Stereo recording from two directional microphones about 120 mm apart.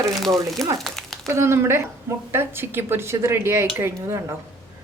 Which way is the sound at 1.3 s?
20° right (ahead or behind).